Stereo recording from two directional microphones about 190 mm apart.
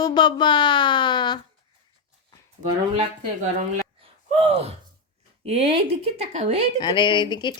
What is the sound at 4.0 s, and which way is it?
Gasp, 35° right (ahead or behind).